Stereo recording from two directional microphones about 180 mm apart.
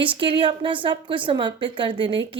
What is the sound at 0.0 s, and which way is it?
A woman's voice, 30° right (ahead or behind).